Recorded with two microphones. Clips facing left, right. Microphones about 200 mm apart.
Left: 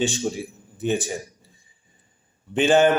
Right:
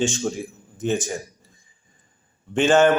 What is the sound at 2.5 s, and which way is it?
Speech, 15° left (ahead or behind).